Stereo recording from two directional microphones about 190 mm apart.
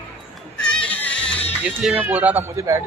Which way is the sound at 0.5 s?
5° left (ahead or behind).